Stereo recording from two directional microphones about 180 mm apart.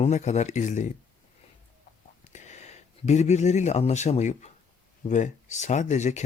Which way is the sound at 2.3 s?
40° left (ahead or behind).